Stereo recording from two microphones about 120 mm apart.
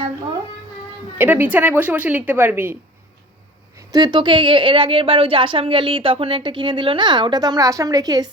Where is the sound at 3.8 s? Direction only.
35° right (ahead or behind).